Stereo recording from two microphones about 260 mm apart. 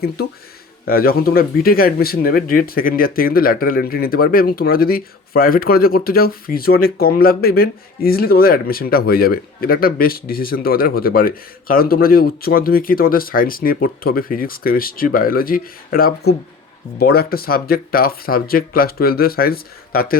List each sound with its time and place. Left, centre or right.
0.9 s speech: left